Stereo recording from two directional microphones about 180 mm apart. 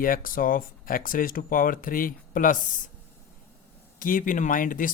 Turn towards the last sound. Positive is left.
turn(degrees=50)  # may be behind; listen again after turning